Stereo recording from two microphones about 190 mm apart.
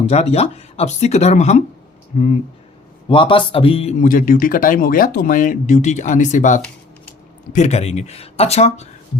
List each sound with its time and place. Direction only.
0.1 s speech: 35° left (ahead or behind)
3.1 s speech: 25° left (ahead or behind)
4.0 s speech: 45° left (ahead or behind)